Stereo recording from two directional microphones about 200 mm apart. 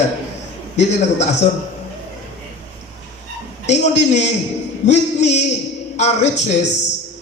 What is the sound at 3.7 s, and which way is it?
A man's voice, 35° left (ahead or behind).